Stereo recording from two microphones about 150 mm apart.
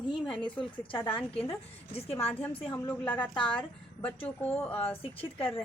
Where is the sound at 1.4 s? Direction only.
40° left (ahead or behind).